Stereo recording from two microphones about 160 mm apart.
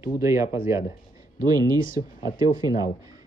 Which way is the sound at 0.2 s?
20° right (ahead or behind).